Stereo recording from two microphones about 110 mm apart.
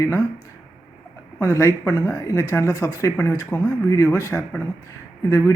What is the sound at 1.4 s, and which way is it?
Speech, 25° left (ahead or behind).